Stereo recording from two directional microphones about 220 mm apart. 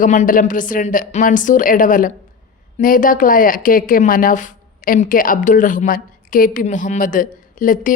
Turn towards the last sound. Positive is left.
turn(degrees=40)  # may be behind; listen again after turning